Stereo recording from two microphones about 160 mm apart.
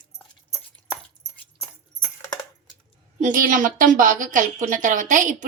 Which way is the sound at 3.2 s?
55° right (ahead or behind).